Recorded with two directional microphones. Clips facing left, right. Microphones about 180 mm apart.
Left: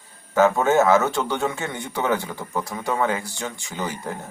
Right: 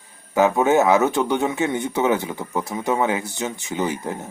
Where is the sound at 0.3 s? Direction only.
15° right (ahead or behind).